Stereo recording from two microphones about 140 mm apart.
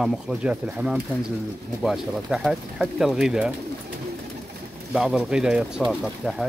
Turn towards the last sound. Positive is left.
turn(degrees=0)  # may be behind; listen again after turning